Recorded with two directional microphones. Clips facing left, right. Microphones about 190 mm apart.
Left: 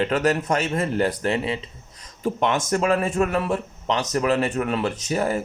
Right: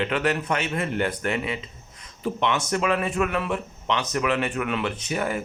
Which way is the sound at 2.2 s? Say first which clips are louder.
Left 3 dB; 45° left (ahead or behind).